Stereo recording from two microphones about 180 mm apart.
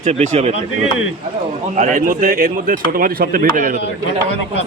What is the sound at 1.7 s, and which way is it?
Speech, 45° right (ahead or behind).